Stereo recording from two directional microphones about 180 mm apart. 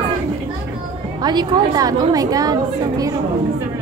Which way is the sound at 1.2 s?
20° right (ahead or behind).